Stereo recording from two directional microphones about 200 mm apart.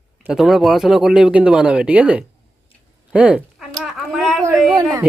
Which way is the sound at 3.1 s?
5° right (ahead or behind).